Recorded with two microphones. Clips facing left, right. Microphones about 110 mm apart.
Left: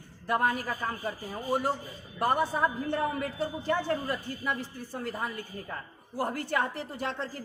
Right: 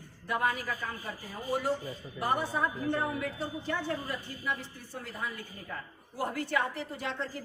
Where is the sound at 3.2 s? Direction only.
45° left (ahead or behind).